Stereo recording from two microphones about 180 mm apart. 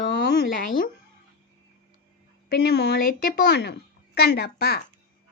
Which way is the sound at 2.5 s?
60° left (ahead or behind).